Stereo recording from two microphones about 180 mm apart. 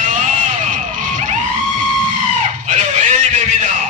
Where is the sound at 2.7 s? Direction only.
45° right (ahead or behind).